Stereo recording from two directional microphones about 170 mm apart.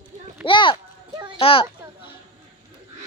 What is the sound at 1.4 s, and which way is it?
Speech, 30° left (ahead or behind).